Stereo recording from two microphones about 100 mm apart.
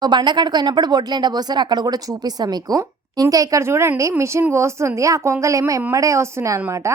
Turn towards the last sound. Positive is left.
turn(degrees=-25)  # may be behind; listen again after turning